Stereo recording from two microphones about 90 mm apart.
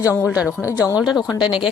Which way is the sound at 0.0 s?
35° left (ahead or behind).